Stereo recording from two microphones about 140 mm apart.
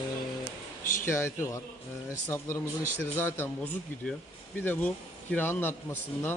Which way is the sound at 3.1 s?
15° left (ahead or behind).